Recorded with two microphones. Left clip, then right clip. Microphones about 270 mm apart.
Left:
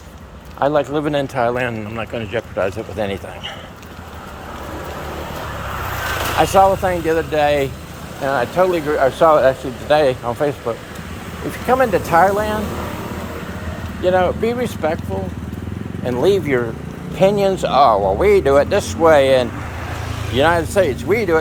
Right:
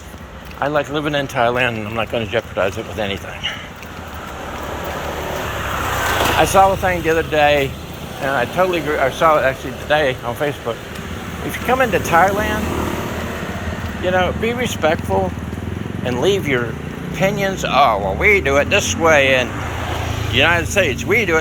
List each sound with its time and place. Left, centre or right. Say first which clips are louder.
0.6 s speech: left 2 dB; left
6.4 s speech: left 2 dB; centre
14.0 s speech: left 2 dB; left
16.0 s speech: left 1 dB; centre
17.2 s speech: left 4 dB; left